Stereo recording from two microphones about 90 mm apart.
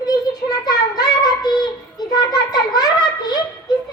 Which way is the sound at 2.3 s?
45° left (ahead or behind).